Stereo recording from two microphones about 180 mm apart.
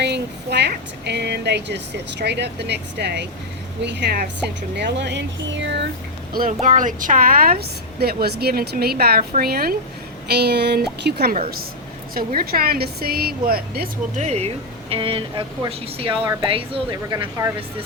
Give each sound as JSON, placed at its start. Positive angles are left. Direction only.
{"t": 0.0, "sound": "speech", "side_deg": -70}
{"t": 6.6, "sound": "a woman's voice", "side_deg": -45}
{"t": 14.2, "sound": "a woman's voice", "side_deg": -35}